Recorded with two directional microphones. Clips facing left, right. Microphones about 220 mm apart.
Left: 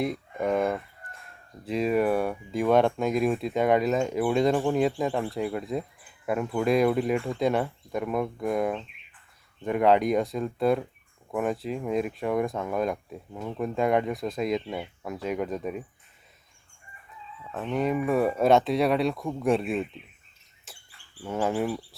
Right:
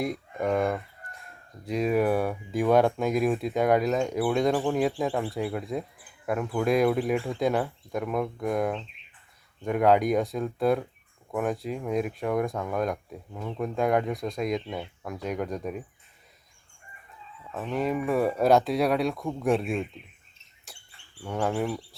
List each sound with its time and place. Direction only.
0.0 s speech: centre (ahead or behind)
17.5 s speech: centre (ahead or behind)
20.7 s a sound: centre (ahead or behind)
21.2 s speech: 5° left (ahead or behind)